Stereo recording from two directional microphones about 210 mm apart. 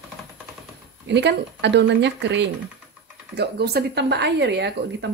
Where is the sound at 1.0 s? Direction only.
55° right (ahead or behind).